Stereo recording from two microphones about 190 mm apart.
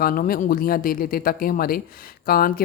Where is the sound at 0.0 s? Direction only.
50° left (ahead or behind).